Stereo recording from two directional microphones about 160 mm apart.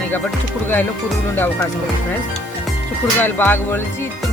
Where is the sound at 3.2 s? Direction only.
15° left (ahead or behind).